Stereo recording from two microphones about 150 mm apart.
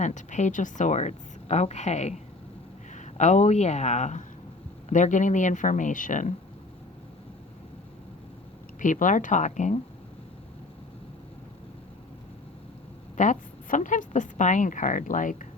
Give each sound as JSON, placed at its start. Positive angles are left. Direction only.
{"t": 0.0, "sound": "a woman's voice", "side_deg": 55}
{"t": 8.8, "sound": "a woman's voice", "side_deg": 60}
{"t": 13.1, "sound": "a woman's voice", "side_deg": 55}